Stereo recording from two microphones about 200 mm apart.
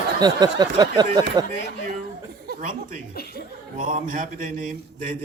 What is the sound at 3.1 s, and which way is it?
Speech, 50° left (ahead or behind).